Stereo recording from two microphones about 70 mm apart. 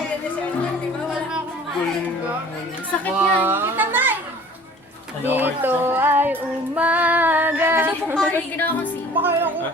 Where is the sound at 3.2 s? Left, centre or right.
Right.